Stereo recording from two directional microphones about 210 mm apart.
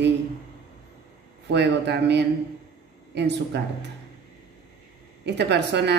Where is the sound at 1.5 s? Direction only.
55° right (ahead or behind).